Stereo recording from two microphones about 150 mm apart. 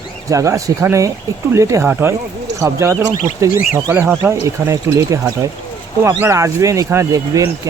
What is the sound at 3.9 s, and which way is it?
Speech, 10° right (ahead or behind).